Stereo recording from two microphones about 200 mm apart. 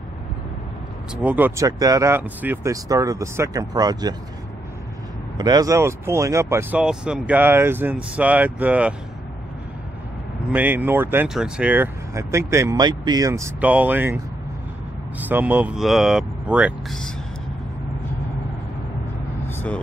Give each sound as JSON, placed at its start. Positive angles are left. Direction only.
{"t": 1.1, "sound": "speech", "side_deg": -10}
{"t": 5.4, "sound": "speech", "side_deg": -20}
{"t": 10.5, "sound": "speech", "side_deg": -10}
{"t": 19.4, "sound": "vehicle", "side_deg": 10}